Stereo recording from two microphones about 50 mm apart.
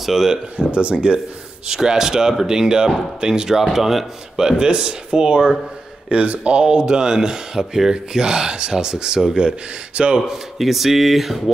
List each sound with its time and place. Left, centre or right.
0.0 s speech: centre
0.6 s speech: right
6.0 s speech: right
10.3 s speech: centre